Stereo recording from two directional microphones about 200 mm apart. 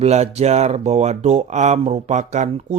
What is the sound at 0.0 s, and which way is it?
Speech, 35° right (ahead or behind).